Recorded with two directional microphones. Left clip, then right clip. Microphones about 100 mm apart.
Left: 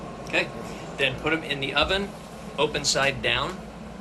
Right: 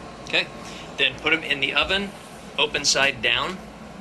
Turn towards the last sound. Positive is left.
turn(degrees=10)  # may be behind; listen again after turning